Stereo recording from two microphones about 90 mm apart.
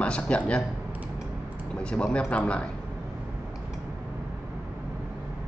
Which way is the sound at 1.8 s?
10° left (ahead or behind).